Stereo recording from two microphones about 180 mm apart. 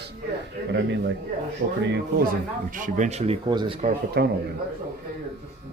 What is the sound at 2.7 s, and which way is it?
Speech, 45° right (ahead or behind).